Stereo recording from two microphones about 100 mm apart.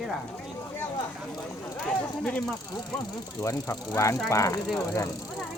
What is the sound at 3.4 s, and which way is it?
Speech, 30° left (ahead or behind).